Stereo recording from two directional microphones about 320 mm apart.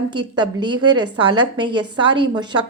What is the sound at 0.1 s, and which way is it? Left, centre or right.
A woman's voice, centre.